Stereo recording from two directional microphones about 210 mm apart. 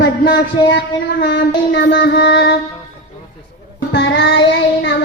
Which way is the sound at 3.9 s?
60° left (ahead or behind).